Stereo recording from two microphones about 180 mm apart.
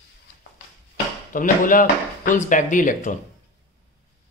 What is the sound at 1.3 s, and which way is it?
Speech, 50° left (ahead or behind).